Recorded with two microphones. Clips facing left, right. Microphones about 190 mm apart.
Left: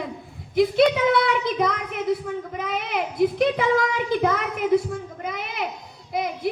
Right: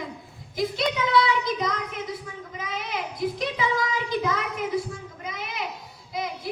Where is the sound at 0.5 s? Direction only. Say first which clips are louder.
Left 8 dB; 60° left (ahead or behind).